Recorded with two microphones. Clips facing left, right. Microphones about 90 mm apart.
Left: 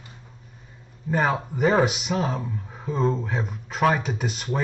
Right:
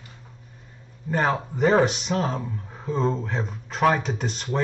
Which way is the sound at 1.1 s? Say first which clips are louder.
Even; 5° left (ahead or behind).